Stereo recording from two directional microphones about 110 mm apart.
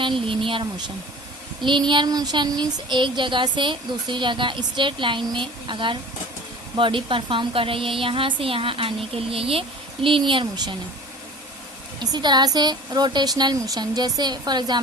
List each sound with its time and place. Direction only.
0.0 s speech: 50° right (ahead or behind)
1.9 s speech: 40° right (ahead or behind)
11.9 s speech: 40° right (ahead or behind)